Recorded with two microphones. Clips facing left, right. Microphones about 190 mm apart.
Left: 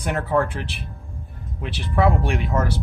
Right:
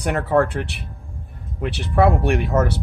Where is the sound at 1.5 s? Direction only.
60° right (ahead or behind).